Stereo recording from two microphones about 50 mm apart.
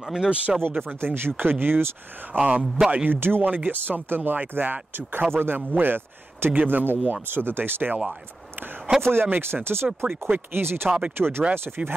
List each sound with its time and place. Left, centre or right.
0.0 s speech: centre
0.6 s speech: right
2.3 s speech: right
3.1 s speech: right
9.0 s speech: right
10.9 s speech: right
11.1 s speech: right